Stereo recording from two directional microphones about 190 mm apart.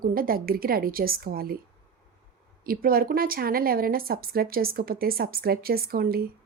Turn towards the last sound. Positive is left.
turn(degrees=-50)  # may be behind; listen again after turning